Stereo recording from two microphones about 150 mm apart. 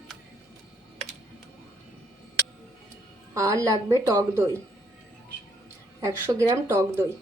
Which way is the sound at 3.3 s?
20° right (ahead or behind).